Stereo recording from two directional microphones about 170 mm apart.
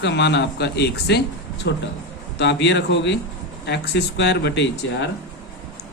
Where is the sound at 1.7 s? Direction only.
90° left.